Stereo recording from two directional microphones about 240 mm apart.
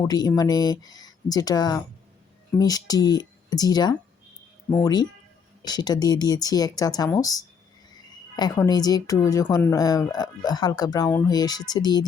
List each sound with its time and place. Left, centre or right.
0.1 s a woman's voice: centre